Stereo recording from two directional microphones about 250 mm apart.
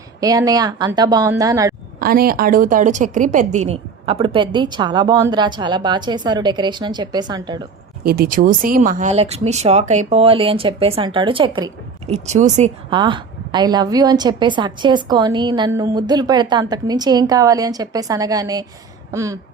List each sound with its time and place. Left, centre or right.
0.2 s a woman's voice: centre
2.0 s a woman's voice: right; by 7.6 s centre
8.0 s a woman's voice: right; by 19.4 s centre